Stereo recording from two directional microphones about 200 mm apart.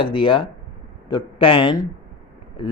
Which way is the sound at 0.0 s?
25° left (ahead or behind).